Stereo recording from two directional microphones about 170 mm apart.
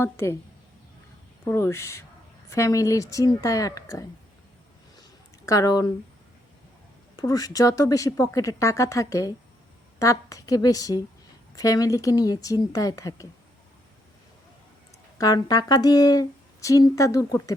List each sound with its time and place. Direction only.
0.0 s speech: 15° left (ahead or behind)
1.5 s speech: 15° left (ahead or behind)
5.5 s speech: 20° left (ahead or behind)
7.2 s speech: 20° left (ahead or behind)
15.2 s speech: 20° left (ahead or behind)